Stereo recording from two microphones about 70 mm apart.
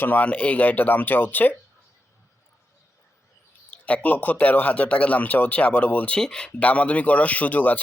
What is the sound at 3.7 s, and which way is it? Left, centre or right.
Speech, centre.